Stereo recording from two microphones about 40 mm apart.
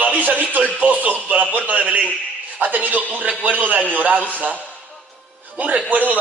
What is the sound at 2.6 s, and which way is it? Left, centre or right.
Speech, right.